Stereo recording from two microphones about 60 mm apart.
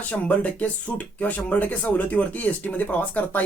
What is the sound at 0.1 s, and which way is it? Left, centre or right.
Speech, left.